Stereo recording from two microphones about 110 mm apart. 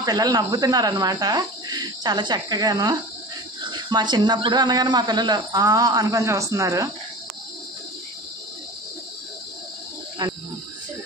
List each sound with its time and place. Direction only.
0.0 s speech: 35° right (ahead or behind)